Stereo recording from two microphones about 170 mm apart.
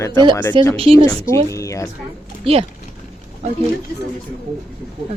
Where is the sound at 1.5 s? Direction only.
20° left (ahead or behind).